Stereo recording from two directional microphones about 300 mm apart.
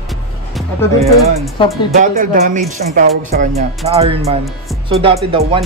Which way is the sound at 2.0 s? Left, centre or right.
Right.